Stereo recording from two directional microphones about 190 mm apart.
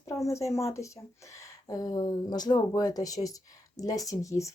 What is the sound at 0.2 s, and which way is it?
Speech, 15° left (ahead or behind).